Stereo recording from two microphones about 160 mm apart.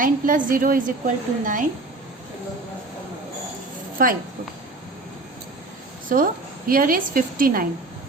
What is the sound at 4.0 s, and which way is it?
Speech, 60° right (ahead or behind).